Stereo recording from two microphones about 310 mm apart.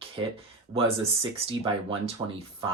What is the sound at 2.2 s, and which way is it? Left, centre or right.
Speech, centre.